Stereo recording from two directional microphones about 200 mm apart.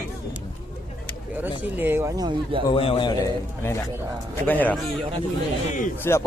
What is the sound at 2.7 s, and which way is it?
Speech, 30° left (ahead or behind).